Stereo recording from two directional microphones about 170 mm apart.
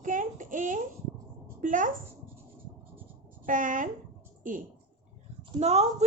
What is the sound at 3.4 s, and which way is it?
Speech, 50° right (ahead or behind).